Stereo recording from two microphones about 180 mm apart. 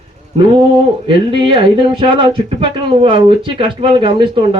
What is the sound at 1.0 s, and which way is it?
Speech, 25° right (ahead or behind).